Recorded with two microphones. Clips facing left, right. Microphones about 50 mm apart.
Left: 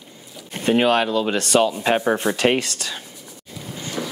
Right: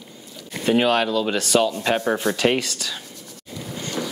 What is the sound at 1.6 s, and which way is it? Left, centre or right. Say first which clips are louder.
Speech: left 2 dB; centre.